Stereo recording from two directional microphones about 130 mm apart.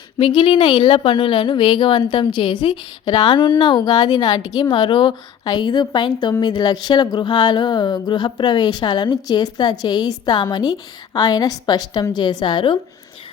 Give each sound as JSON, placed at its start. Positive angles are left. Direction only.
{"t": 0.2, "sound": "a woman's voice", "side_deg": 40}